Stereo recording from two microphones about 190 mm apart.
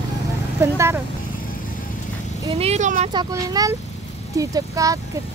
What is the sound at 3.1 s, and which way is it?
Speech, 20° right (ahead or behind).